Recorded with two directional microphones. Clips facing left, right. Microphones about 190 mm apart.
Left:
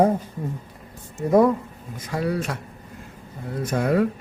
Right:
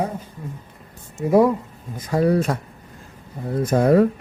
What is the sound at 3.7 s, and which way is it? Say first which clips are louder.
Speech: right 6 dB; 35° right (ahead or behind).